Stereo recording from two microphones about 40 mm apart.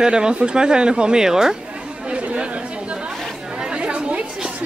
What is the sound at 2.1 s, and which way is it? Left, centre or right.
Chatter, right.